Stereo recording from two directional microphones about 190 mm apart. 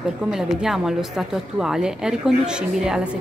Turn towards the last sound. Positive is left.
turn(degrees=-5)  # may be behind; listen again after turning